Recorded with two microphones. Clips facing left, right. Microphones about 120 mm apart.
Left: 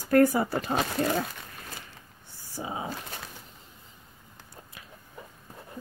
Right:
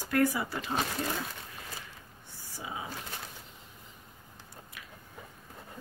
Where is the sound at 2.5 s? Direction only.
35° left (ahead or behind).